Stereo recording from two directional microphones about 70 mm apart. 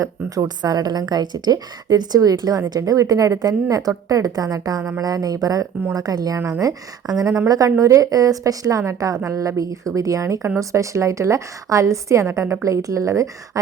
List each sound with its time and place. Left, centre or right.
0.4 s a woman's voice: right